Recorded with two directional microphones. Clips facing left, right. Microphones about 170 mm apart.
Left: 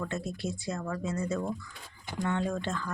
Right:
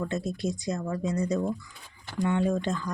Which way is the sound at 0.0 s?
15° right (ahead or behind).